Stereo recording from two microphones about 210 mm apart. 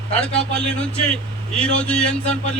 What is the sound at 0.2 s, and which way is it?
A man's voice, 5° left (ahead or behind).